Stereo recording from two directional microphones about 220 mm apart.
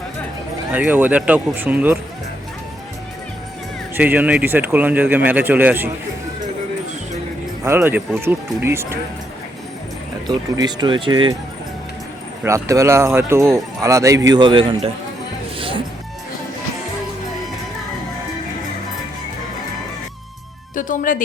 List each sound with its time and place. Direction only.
0.7 s speech: 5° right (ahead or behind)
3.9 s speech: 5° right (ahead or behind)
7.6 s speech: 10° right (ahead or behind)
10.2 s a man's voice: 20° right (ahead or behind)
12.4 s a man's voice: 15° right (ahead or behind)
15.5 s music: 25° right (ahead or behind)
20.7 s speech: 35° left (ahead or behind)